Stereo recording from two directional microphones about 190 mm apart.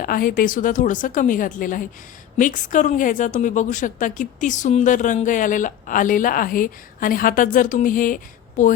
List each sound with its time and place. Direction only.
0.0 s a woman's voice: 50° left (ahead or behind)